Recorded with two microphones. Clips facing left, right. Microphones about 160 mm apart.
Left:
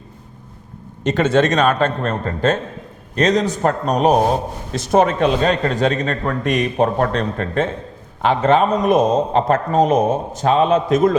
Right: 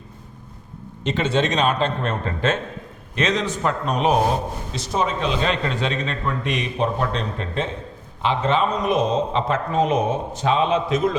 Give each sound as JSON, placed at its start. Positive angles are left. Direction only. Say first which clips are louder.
{"t": 1.0, "sound": "a man's voice", "louder": "left 6 dB", "side_deg": 45}